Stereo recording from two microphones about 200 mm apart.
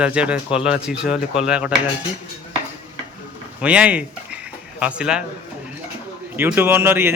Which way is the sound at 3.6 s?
5° right (ahead or behind).